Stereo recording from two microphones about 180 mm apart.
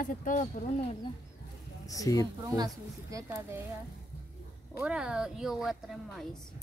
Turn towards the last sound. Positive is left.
turn(degrees=-5)  # may be behind; listen again after turning